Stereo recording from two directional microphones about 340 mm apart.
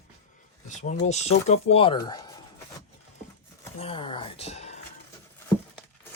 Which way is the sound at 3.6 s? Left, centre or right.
Centre.